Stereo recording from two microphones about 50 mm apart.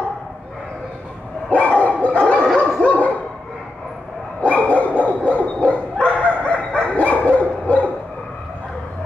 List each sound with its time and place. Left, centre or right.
1.5 s dog: left
4.4 s dog: left